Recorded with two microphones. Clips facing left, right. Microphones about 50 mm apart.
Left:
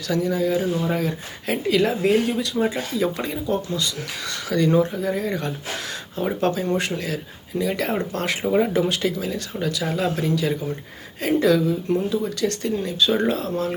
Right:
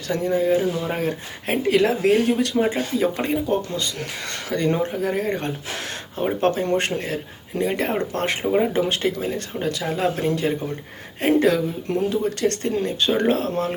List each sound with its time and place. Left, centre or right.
0.1 s speech: right